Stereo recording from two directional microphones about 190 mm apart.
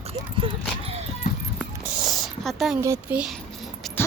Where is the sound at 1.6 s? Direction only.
Centre (ahead or behind).